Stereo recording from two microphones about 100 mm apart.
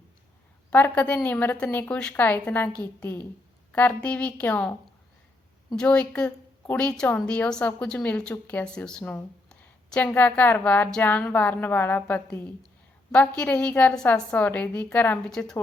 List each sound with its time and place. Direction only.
0.7 s a woman's voice: 15° left (ahead or behind)
5.7 s a woman's voice: 10° left (ahead or behind)
15.3 s a woman's voice: 5° left (ahead or behind)